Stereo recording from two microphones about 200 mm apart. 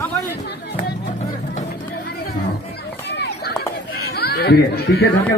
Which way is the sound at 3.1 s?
55° left (ahead or behind).